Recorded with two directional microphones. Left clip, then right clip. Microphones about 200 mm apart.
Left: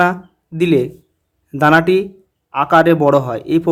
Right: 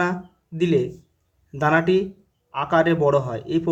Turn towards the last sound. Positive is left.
turn(degrees=40)  # may be behind; listen again after turning